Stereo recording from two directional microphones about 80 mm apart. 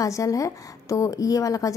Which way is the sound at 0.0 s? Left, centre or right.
Left.